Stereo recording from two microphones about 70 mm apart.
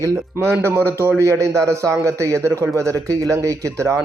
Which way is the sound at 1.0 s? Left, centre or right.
Right.